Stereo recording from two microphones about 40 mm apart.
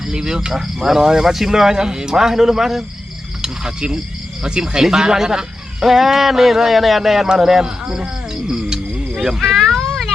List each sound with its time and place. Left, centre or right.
0.0 s speech: centre
0.5 s speech: centre
3.4 s a sound: centre
4.4 s speech: centre